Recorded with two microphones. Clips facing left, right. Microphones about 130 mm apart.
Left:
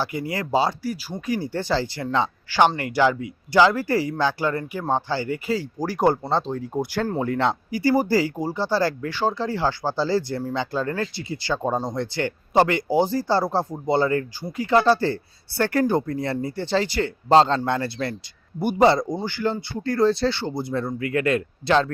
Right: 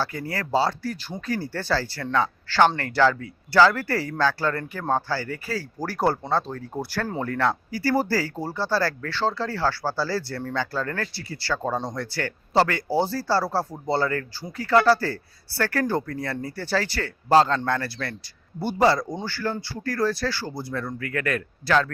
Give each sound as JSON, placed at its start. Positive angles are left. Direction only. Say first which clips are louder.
{"t": 0.0, "sound": "speech", "louder": "left 2 dB", "side_deg": 15}